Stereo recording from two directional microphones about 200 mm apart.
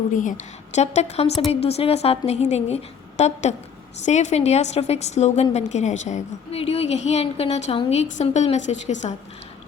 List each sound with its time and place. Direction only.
0.1 s a woman's voice: 40° left (ahead or behind)